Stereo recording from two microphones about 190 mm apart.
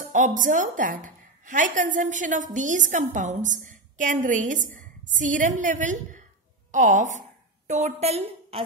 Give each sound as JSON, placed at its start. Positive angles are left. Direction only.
{"t": 0.0, "sound": "a woman's voice", "side_deg": -45}